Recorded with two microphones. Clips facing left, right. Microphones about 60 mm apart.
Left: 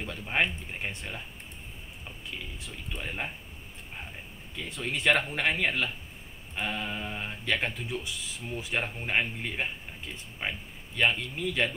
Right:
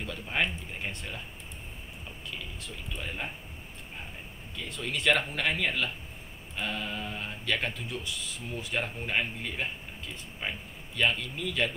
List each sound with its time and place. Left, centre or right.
0.0 s speech: centre
2.3 s speech: centre
4.6 s speech: centre